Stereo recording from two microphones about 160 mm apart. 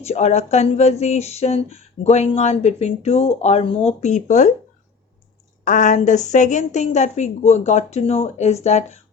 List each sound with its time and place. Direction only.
0.0 s speech: 45° left (ahead or behind)
5.6 s a woman's voice: 50° left (ahead or behind)